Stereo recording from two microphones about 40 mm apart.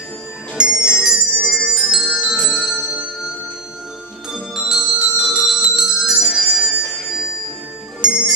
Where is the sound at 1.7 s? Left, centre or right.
Centre.